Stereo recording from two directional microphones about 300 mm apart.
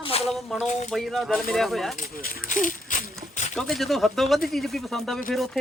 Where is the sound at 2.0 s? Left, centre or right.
Left.